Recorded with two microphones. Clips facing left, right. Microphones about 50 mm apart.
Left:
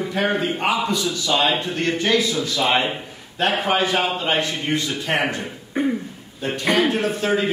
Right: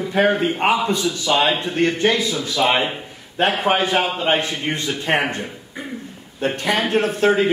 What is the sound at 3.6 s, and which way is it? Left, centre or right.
A man's voice, centre.